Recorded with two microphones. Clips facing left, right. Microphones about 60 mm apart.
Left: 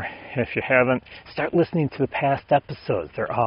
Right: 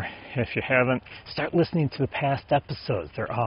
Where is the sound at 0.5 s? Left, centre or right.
Centre.